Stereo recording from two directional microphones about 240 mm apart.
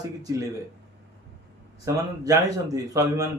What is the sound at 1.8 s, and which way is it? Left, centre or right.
Speech, centre.